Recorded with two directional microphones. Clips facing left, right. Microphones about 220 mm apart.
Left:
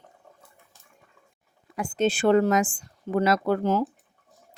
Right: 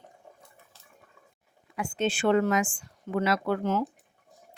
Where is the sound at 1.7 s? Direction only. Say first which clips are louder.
Left 4 dB; 40° left (ahead or behind).